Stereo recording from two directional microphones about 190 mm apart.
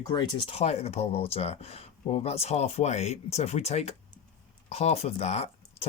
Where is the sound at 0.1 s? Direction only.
25° left (ahead or behind).